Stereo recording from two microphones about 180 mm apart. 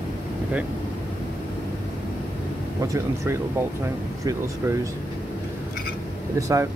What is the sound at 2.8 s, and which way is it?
Speech, 15° right (ahead or behind).